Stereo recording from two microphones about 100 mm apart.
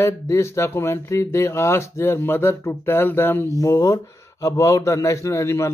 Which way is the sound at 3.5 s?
30° left (ahead or behind).